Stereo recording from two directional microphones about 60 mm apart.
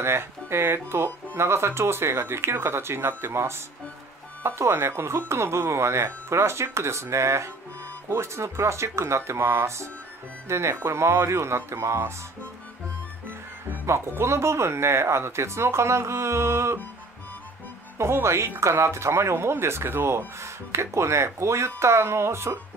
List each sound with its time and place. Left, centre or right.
0.0 s speech: right
13.8 s speech: right
17.9 s speech: right